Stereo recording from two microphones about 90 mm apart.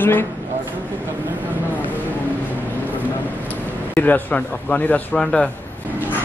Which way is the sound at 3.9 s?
20° left (ahead or behind).